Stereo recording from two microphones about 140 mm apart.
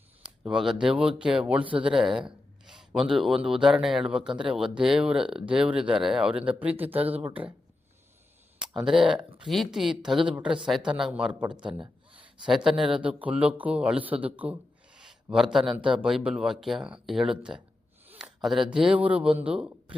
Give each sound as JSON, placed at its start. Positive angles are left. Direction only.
{"t": 0.4, "sound": "speech", "side_deg": -5}
{"t": 1.8, "sound": "a sound", "side_deg": -5}
{"t": 3.1, "sound": "speech", "side_deg": 0}
{"t": 4.3, "sound": "speech", "side_deg": -35}
{"t": 4.5, "sound": "speech", "side_deg": -5}
{"t": 8.6, "sound": "a man's voice", "side_deg": -5}
{"t": 15.7, "sound": "speech", "side_deg": -35}
{"t": 16.0, "sound": "speech", "side_deg": -5}
{"t": 18.2, "sound": "a sound", "side_deg": -5}
{"t": 18.7, "sound": "speech", "side_deg": -5}